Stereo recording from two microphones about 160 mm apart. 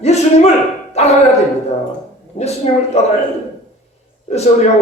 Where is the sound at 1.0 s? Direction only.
45° left (ahead or behind).